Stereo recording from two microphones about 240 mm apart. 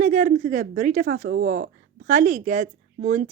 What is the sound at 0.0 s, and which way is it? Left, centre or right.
A woman's voice, right.